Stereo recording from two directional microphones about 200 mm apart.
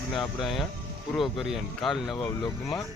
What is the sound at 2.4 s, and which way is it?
Speech, 20° left (ahead or behind).